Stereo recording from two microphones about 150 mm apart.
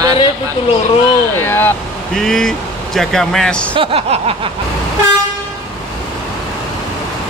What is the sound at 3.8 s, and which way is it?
Speech, 40° right (ahead or behind).